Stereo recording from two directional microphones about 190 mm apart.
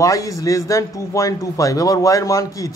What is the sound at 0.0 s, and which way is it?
A man's voice, 15° left (ahead or behind).